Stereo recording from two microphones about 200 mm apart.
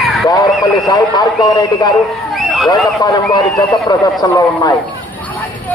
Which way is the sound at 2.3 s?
Centre (ahead or behind).